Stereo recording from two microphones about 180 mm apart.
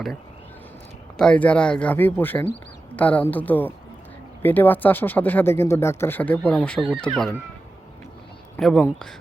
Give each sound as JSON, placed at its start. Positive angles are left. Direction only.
{"t": 1.1, "sound": "speech", "side_deg": 5}
{"t": 8.5, "sound": "a man's voice", "side_deg": 5}